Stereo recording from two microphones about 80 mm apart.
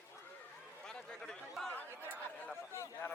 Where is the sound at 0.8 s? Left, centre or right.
Centre.